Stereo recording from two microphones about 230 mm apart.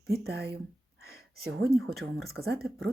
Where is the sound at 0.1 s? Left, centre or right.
Right.